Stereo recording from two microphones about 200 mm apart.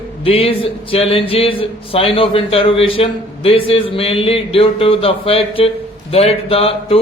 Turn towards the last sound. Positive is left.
turn(degrees=30)  # may be behind; listen again after turning